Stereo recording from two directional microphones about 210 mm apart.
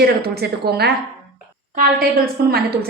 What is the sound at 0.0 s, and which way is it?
A woman's voice, 50° right (ahead or behind).